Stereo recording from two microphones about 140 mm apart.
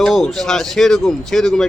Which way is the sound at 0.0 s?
Centre (ahead or behind).